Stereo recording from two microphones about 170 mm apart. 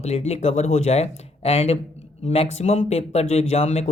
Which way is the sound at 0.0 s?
40° left (ahead or behind).